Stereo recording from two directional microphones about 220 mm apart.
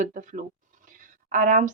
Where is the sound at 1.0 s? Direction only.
35° right (ahead or behind).